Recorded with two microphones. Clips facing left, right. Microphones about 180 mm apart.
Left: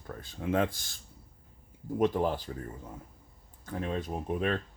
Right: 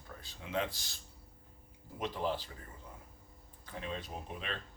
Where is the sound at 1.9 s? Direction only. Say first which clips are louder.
Left 9 dB; 50° left (ahead or behind).